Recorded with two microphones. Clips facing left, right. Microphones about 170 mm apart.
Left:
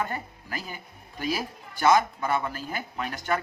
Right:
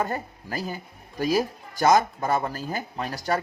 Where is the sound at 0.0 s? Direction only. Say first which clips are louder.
Right 3 dB; 40° right (ahead or behind).